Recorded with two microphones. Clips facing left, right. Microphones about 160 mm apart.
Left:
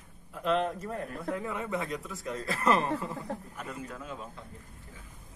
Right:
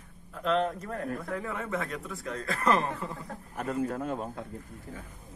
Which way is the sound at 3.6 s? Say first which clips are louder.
Right 9 dB; 50° right (ahead or behind).